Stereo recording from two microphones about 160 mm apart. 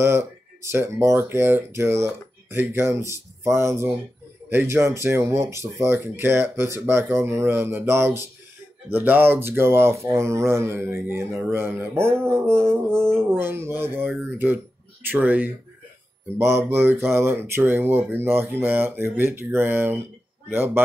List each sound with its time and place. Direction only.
0.0 s speech: 15° right (ahead or behind)